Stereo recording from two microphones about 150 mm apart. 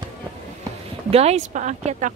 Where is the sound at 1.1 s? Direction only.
45° right (ahead or behind).